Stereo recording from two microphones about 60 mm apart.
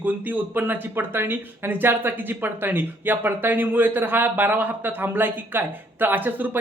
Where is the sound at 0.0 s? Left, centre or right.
Right.